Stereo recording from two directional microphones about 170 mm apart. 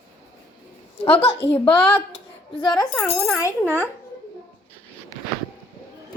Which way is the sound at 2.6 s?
25° left (ahead or behind).